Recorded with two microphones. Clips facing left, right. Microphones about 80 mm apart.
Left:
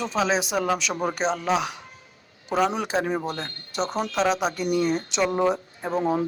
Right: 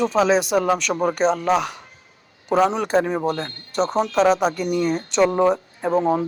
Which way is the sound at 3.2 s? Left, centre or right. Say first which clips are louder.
Right 7 dB; right.